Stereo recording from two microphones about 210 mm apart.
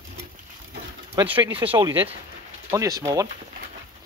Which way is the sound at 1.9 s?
25° right (ahead or behind).